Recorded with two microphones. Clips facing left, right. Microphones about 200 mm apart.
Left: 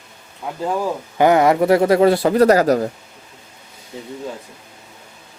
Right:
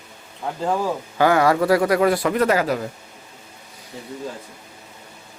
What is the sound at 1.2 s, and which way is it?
A man's voice, 20° left (ahead or behind).